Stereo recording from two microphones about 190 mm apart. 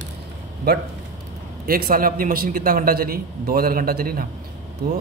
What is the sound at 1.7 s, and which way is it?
A man's voice, 50° right (ahead or behind).